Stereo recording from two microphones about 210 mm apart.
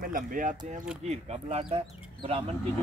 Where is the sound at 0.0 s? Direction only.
40° right (ahead or behind).